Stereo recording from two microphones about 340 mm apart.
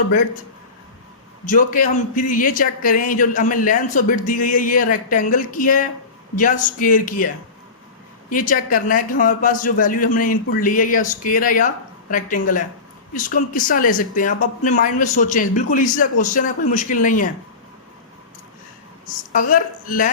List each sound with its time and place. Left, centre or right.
1.5 s speech: left
8.3 s speech: left
19.3 s a woman's voice: left